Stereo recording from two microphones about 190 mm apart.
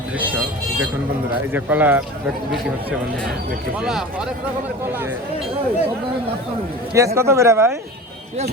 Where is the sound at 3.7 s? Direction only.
5° right (ahead or behind).